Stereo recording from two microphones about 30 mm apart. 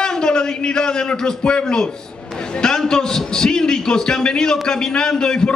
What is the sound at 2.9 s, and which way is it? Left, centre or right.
A man's voice, left.